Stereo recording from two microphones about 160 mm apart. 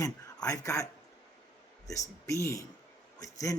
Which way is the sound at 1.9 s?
20° left (ahead or behind).